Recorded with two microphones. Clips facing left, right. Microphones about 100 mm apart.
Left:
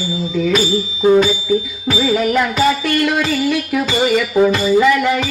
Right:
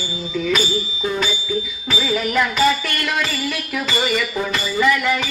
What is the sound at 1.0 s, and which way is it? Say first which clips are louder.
Music: left 12 dB; 35° left (ahead or behind).